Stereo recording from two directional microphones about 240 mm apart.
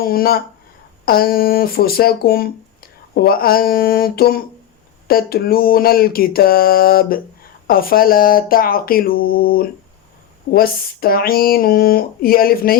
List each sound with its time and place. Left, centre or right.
0.0 s speech: left